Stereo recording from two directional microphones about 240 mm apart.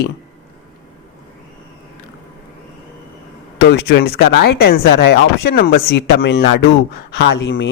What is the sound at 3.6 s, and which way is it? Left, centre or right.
Speech, left.